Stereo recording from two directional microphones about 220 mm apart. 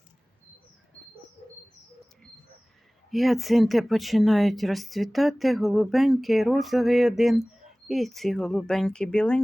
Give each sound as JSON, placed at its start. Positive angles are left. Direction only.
{"t": 3.1, "sound": "speech", "side_deg": 0}